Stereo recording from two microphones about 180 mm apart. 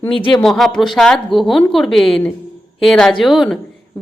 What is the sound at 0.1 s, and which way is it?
Speech, 30° left (ahead or behind).